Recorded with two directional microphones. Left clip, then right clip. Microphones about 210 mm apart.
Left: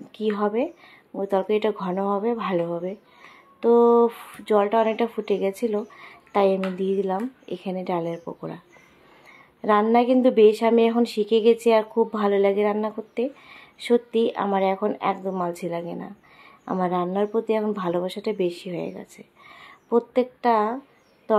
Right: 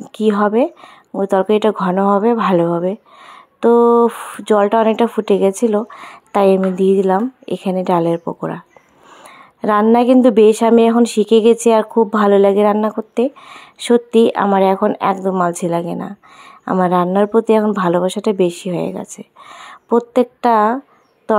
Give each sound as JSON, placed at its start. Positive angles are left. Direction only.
{"t": 0.1, "sound": "speech", "side_deg": -40}
{"t": 9.6, "sound": "speech", "side_deg": -40}